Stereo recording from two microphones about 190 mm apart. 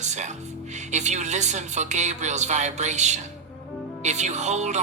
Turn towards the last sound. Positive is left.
turn(degrees=-40)  # may be behind; listen again after turning